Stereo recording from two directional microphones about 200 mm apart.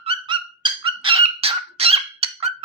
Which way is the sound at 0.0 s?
25° right (ahead or behind).